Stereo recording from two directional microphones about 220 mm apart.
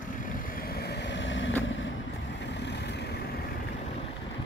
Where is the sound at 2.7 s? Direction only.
50° left (ahead or behind).